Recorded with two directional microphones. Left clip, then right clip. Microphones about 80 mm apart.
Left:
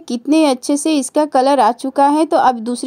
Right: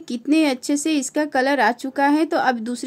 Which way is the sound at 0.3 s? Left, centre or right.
Left.